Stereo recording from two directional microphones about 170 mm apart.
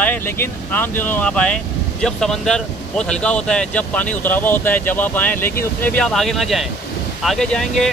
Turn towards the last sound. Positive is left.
turn(degrees=5)  # may be behind; listen again after turning